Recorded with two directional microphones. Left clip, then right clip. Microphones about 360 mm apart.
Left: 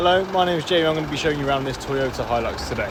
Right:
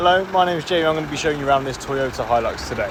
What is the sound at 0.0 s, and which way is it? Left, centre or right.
Speech, centre.